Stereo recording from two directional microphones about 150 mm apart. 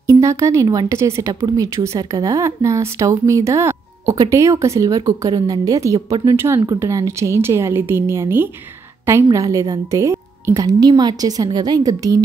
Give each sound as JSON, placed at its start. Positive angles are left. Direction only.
{"t": 0.0, "sound": "speech", "side_deg": -20}